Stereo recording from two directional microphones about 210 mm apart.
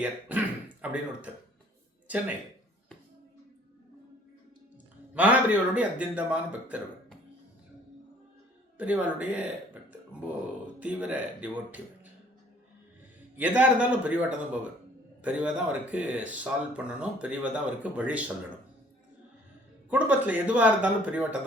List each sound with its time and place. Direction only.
0.0 s speech: 5° right (ahead or behind)
5.1 s speech: 5° right (ahead or behind)
8.8 s speech: 5° right (ahead or behind)
10.8 s speech: 5° right (ahead or behind)
13.3 s speech: 5° right (ahead or behind)
19.9 s speech: 5° right (ahead or behind)